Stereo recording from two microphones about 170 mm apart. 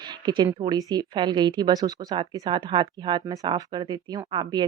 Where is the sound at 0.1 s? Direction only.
25° right (ahead or behind).